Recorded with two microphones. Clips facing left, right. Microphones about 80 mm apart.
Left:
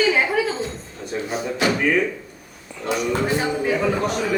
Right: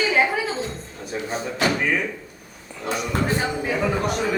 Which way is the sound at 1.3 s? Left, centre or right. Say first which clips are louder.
Left 2 dB; right.